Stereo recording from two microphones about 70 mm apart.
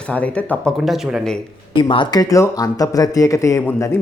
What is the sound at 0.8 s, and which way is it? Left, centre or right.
Speech, centre.